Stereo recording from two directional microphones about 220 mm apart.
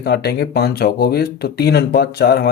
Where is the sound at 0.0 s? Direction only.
45° left (ahead or behind).